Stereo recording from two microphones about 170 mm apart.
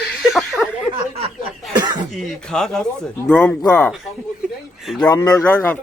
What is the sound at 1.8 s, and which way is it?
Cough, 25° right (ahead or behind).